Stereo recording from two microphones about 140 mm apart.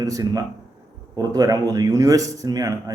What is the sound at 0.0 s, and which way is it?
Speech, 25° right (ahead or behind).